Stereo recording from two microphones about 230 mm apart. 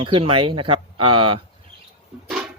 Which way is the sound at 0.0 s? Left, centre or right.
Right.